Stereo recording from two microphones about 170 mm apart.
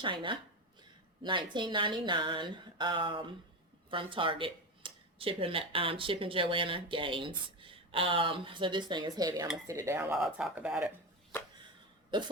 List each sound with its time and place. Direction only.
0.0 s speech: 30° right (ahead or behind); by 10.9 s 5° right (ahead or behind)
12.1 s speech: 30° right (ahead or behind)